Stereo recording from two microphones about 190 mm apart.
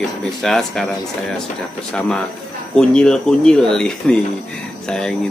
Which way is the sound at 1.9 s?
5° left (ahead or behind).